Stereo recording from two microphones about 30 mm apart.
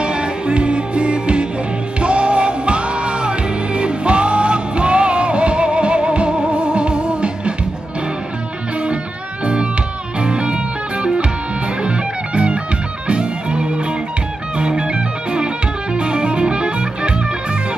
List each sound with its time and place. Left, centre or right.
0.0 s music: right
10.2 s music: right